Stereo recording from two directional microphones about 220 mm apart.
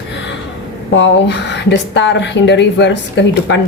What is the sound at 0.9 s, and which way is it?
Speech, 55° left (ahead or behind).